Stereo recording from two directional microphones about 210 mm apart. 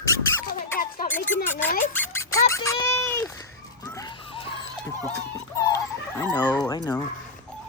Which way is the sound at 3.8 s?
20° left (ahead or behind).